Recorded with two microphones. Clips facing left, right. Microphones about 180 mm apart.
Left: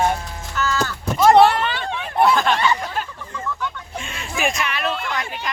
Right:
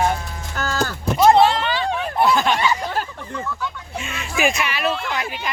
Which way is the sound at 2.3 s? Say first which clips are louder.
Even; centre (ahead or behind).